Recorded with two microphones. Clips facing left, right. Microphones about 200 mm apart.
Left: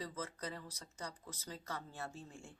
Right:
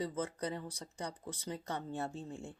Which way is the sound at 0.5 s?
15° right (ahead or behind).